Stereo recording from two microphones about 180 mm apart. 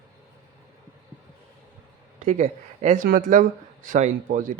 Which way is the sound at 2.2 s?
40° right (ahead or behind).